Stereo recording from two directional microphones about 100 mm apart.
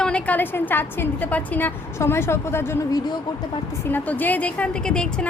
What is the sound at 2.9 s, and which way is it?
Speech, 40° left (ahead or behind).